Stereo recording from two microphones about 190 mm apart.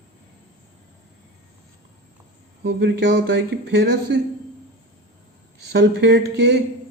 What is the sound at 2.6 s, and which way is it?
Speech, 60° right (ahead or behind).